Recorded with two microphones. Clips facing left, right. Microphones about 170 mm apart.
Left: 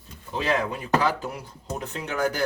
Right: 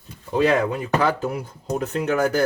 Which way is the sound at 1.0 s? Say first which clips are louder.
Right 4 dB; 55° right (ahead or behind).